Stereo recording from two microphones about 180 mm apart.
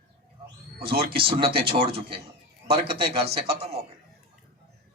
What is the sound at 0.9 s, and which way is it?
A man's voice, 30° right (ahead or behind).